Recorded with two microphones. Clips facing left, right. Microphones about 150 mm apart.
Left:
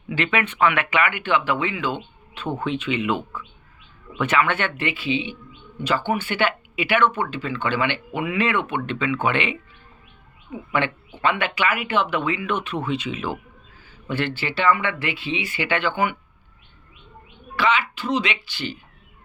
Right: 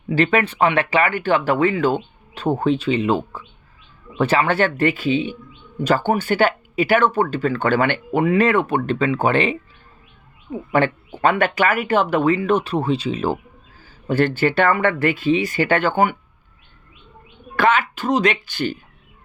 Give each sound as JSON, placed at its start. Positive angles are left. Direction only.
{"t": 0.1, "sound": "speech", "side_deg": -40}
{"t": 17.6, "sound": "speech", "side_deg": -50}